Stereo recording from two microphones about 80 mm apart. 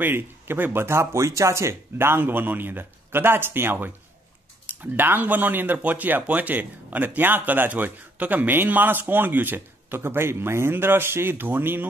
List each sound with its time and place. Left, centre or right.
0.0 s speech: right